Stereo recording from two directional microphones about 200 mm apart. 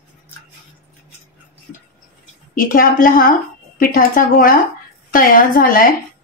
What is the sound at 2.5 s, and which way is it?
A woman's voice, 45° left (ahead or behind).